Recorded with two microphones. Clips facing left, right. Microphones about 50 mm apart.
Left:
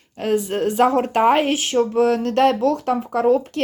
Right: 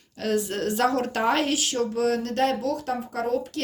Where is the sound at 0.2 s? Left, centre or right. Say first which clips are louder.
Left 5 dB; left.